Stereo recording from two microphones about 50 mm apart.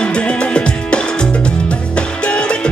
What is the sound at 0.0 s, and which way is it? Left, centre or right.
Music, left.